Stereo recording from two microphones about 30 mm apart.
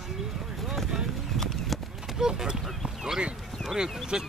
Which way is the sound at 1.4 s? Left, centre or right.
Centre.